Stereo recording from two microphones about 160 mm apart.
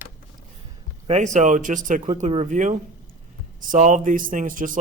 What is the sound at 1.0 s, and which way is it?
Speech, 45° right (ahead or behind).